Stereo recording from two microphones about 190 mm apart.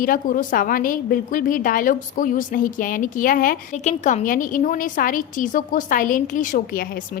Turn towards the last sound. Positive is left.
turn(degrees=50)  # may be behind; listen again after turning